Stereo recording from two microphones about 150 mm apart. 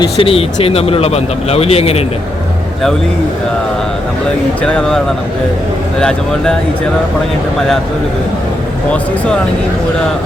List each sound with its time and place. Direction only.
0.0 s speech: 40° left (ahead or behind)
4.6 s speech: 5° left (ahead or behind)
6.0 s speech: 5° left (ahead or behind)
8.9 s speech: 10° left (ahead or behind)